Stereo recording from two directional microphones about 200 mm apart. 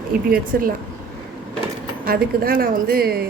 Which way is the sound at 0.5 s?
50° right (ahead or behind).